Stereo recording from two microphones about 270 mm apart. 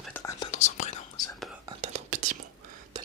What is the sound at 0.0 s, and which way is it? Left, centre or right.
Whispering, centre.